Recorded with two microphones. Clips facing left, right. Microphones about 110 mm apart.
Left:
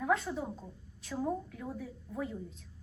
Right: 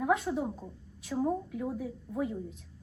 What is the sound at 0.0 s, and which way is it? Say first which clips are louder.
A woman's voice: right 3 dB; 5° right (ahead or behind).